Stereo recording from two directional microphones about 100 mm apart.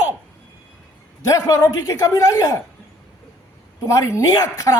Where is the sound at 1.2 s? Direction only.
35° left (ahead or behind).